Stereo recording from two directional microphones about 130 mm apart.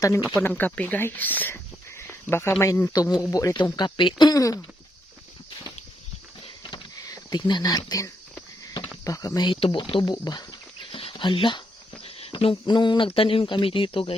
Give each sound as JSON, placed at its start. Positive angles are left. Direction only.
{"t": 0.0, "sound": "speech", "side_deg": 25}
{"t": 0.4, "sound": "speech", "side_deg": 15}
{"t": 2.9, "sound": "speech", "side_deg": 30}
{"t": 6.4, "sound": "a sound", "side_deg": 40}
{"t": 9.0, "sound": "speech", "side_deg": 25}
{"t": 9.6, "sound": "speech", "side_deg": 45}